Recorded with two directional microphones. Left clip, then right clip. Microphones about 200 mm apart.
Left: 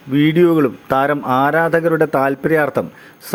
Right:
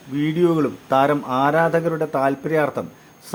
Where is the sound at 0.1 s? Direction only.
25° left (ahead or behind).